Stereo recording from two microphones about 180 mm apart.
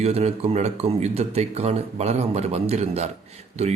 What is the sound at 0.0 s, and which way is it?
A man's voice, 35° right (ahead or behind).